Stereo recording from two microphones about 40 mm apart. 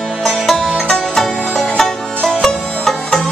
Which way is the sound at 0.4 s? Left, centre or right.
Centre.